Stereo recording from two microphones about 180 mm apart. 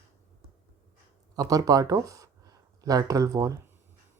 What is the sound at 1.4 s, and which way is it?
Speech, 20° right (ahead or behind).